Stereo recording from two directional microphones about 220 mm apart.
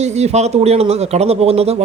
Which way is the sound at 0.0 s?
30° right (ahead or behind).